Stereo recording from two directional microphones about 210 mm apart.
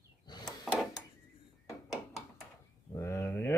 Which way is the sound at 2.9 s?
10° left (ahead or behind).